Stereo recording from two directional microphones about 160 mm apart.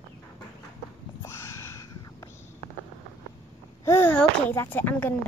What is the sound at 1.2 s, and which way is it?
Whispering, 15° left (ahead or behind).